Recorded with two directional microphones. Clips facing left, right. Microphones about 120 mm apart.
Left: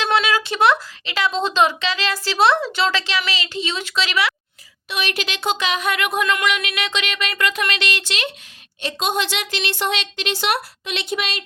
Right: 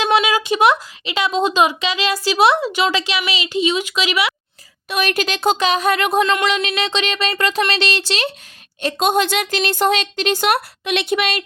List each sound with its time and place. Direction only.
0.0 s speech: 15° right (ahead or behind)
4.9 s speech: 50° right (ahead or behind); by 8.3 s 35° right (ahead or behind)
8.8 s a woman's voice: 50° right (ahead or behind)